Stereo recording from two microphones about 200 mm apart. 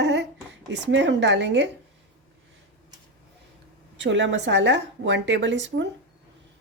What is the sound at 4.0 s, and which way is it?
Speech, 65° right (ahead or behind).